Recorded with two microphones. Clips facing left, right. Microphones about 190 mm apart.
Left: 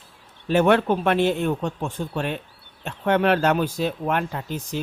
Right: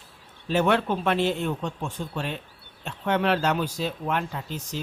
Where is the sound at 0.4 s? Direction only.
55° left (ahead or behind).